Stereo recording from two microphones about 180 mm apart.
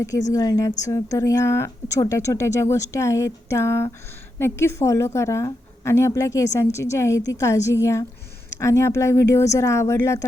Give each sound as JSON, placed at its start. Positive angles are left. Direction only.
{"t": 0.3, "sound": "a woman's voice", "side_deg": 20}